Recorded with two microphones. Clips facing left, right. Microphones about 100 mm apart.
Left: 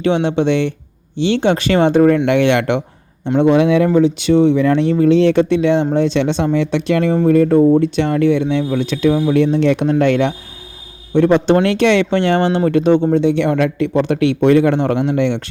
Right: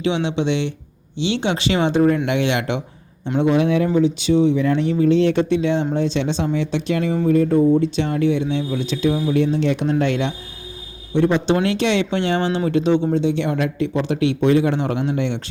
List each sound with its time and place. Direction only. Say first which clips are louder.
0.0 s speech: left 5 dB; 50° left (ahead or behind)
7.3 s speech: left 4 dB; 75° left (ahead or behind)